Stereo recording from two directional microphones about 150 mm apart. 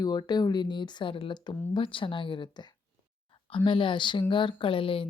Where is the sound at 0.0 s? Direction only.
30° left (ahead or behind).